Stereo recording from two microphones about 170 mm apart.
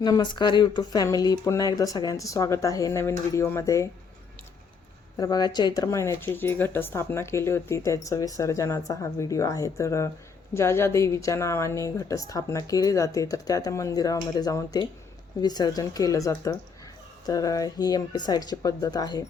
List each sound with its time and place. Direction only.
0.0 s a woman's voice: 25° left (ahead or behind)
5.1 s a woman's voice: 25° left (ahead or behind)